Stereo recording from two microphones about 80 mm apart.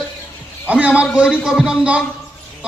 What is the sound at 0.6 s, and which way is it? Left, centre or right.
A man's voice, centre.